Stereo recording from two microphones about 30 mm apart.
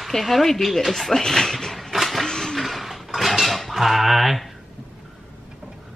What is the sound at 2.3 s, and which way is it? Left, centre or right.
Vehicle, left.